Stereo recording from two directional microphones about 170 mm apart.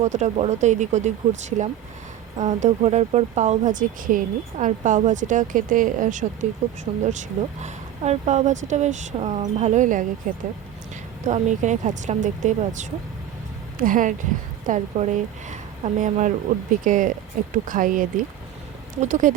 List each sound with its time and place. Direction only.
0.0 s speech: 45° right (ahead or behind)
11.3 s speech: 45° right (ahead or behind)